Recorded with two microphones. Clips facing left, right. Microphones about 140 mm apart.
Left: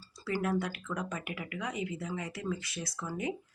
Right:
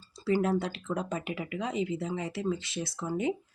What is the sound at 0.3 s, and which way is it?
Speech, 25° right (ahead or behind).